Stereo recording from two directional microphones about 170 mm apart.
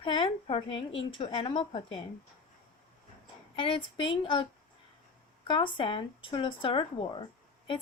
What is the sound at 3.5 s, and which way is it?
A woman's voice, 30° left (ahead or behind).